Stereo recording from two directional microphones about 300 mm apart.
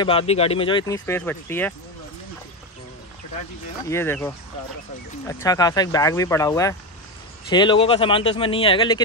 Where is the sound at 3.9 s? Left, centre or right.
Centre.